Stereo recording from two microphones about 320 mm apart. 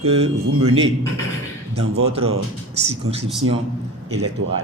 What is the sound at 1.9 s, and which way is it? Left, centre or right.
Speech, centre.